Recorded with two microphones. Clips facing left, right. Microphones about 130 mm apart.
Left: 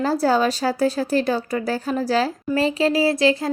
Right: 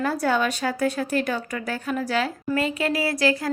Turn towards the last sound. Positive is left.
turn(degrees=25)  # may be behind; listen again after turning